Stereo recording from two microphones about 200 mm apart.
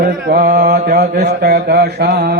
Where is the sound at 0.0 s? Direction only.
45° right (ahead or behind).